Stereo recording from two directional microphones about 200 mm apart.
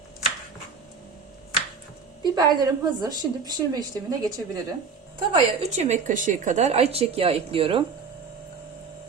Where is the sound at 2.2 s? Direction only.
20° right (ahead or behind).